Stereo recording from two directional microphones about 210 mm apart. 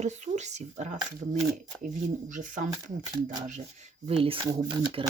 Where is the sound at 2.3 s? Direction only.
35° right (ahead or behind).